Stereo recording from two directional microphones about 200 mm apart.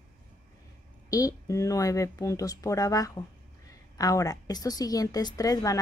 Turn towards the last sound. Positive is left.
turn(degrees=15)  # may be behind; listen again after turning